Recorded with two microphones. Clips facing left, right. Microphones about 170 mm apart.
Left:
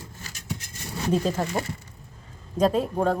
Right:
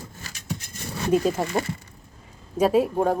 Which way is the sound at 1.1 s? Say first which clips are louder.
Right 3 dB; 10° right (ahead or behind).